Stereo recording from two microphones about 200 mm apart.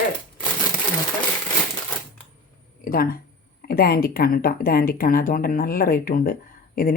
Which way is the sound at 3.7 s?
50° left (ahead or behind).